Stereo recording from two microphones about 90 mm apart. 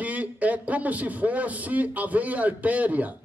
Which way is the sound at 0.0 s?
15° right (ahead or behind).